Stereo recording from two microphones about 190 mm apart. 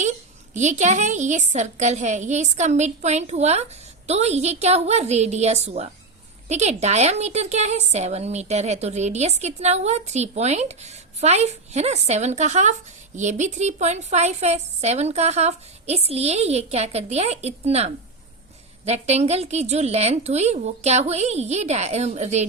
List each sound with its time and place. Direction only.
0.5 s speech: 40° right (ahead or behind)